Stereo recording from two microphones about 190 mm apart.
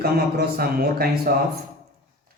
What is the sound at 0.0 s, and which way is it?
Speech, 55° right (ahead or behind).